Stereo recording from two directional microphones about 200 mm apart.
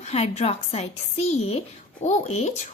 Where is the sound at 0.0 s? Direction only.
35° left (ahead or behind).